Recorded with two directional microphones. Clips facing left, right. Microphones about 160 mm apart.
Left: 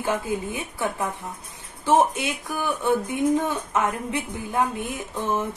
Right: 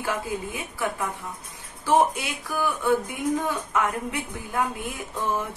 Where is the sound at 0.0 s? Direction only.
25° left (ahead or behind).